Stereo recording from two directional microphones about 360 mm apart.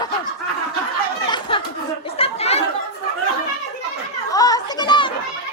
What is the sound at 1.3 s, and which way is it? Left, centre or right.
Chatter, centre.